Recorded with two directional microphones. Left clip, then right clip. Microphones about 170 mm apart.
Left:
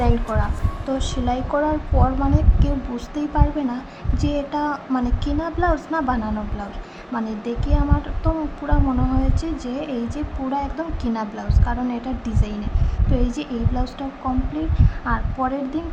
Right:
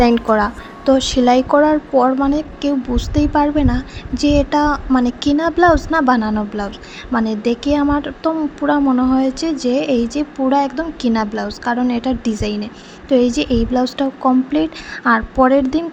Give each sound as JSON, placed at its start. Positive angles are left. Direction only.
{"t": 0.0, "sound": "a woman's voice", "side_deg": -40}